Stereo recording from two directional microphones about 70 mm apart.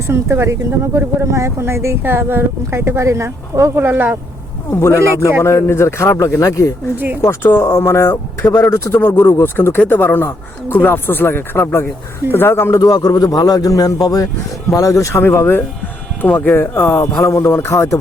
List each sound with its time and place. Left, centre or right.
0.1 s speech: right
3.8 s speech: right
4.7 s speech: left
7.2 s speech: left
12.8 s a man's voice: left
14.8 s speech: left
15.2 s speech: left